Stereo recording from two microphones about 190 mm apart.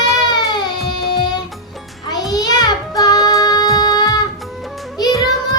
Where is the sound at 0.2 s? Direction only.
20° left (ahead or behind).